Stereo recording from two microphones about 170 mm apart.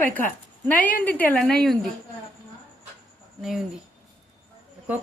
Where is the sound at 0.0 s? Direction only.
10° left (ahead or behind).